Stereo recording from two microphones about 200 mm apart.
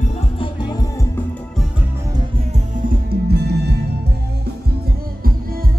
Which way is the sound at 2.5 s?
45° right (ahead or behind).